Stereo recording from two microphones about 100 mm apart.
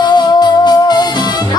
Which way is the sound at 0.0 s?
45° left (ahead or behind).